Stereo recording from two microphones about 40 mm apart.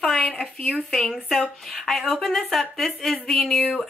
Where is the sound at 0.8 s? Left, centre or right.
Centre.